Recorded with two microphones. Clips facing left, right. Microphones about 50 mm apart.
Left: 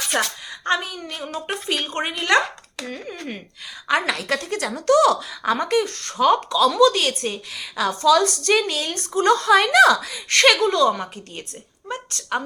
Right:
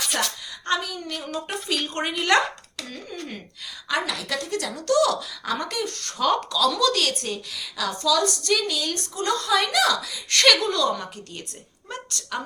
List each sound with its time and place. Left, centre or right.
0.1 s a sound: left
0.8 s a woman's voice: left
2.1 s speech: centre
2.8 s speech: left
4.1 s speech: left
6.1 s speech: centre; by 10.4 s left
10.6 s a woman's voice: left
12.2 s speech: left